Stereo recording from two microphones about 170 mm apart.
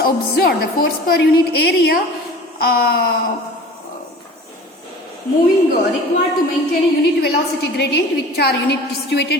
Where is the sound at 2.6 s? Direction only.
65° left (ahead or behind).